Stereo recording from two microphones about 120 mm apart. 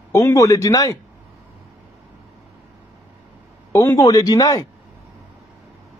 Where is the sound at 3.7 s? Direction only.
20° left (ahead or behind).